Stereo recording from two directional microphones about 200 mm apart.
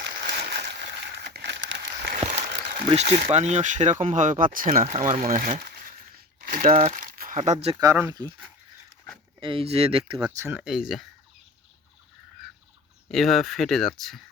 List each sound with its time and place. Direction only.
0.5 s a sound: 55° right (ahead or behind)
2.3 s a sound: 30° right (ahead or behind)
3.3 s speech: 35° right (ahead or behind)
6.4 s crumpling: 45° right (ahead or behind)
7.8 s speech: 15° right (ahead or behind)
9.4 s speech: 25° right (ahead or behind)
10.2 s speech: 10° right (ahead or behind)
13.1 s speech: centre (ahead or behind)